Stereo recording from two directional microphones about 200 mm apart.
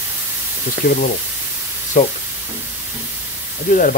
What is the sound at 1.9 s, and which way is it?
Speech, 40° left (ahead or behind).